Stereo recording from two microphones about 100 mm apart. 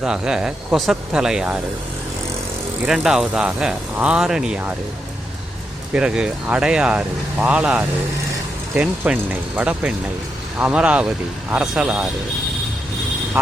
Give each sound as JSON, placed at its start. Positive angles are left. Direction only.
{"t": 0.0, "sound": "speech", "side_deg": -5}
{"t": 2.8, "sound": "speech", "side_deg": -5}
{"t": 5.9, "sound": "speech", "side_deg": -10}